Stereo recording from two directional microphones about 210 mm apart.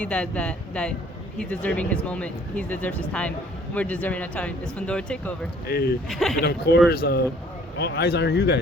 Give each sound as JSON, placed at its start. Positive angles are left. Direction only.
{"t": 0.0, "sound": "speech", "side_deg": 5}
{"t": 5.6, "sound": "speech", "side_deg": 45}
{"t": 6.1, "sound": "speech", "side_deg": 0}
{"t": 6.4, "sound": "speech", "side_deg": 50}